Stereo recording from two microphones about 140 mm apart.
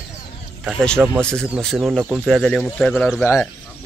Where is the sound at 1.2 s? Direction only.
5° left (ahead or behind).